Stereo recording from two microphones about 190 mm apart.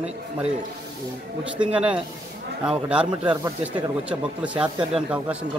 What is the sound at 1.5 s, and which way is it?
Speech, 5° right (ahead or behind).